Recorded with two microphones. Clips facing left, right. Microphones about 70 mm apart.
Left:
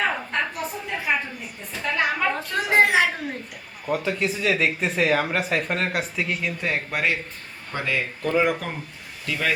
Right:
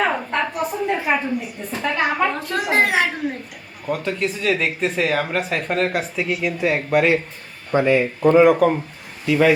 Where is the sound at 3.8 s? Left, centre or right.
Centre.